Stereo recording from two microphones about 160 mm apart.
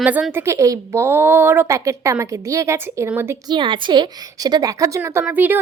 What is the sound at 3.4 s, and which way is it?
A woman's voice, 30° right (ahead or behind).